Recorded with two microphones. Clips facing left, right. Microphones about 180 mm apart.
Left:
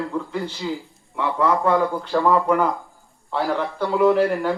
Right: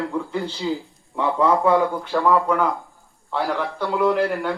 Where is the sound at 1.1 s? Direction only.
20° right (ahead or behind).